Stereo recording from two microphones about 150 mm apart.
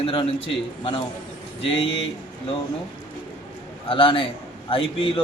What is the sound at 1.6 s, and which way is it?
Speech, 35° left (ahead or behind).